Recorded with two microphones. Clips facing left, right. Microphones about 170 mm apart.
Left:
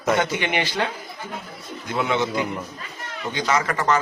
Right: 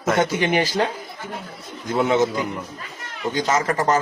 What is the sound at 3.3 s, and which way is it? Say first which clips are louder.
Speech: right 2 dB; 45° right (ahead or behind).